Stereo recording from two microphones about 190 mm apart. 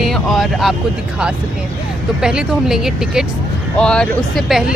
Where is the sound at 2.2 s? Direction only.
5° right (ahead or behind).